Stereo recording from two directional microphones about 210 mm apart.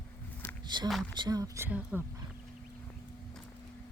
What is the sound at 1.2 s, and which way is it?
Speech, 20° right (ahead or behind).